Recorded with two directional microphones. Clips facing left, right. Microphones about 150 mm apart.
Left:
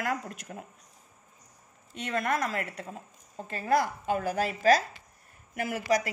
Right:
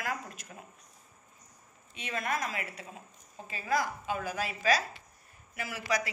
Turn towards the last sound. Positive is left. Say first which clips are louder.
# left 6 dB
turn(degrees=50)  # may be behind; listen again after turning